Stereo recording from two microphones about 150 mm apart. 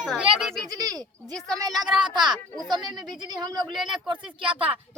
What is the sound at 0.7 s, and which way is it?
Speech, 25° right (ahead or behind).